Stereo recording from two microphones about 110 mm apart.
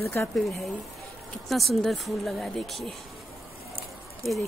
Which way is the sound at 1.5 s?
Centre (ahead or behind).